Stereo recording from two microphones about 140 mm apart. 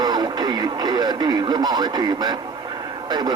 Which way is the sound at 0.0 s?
30° right (ahead or behind).